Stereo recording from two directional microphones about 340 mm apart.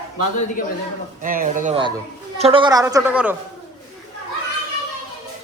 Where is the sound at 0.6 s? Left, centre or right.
Left.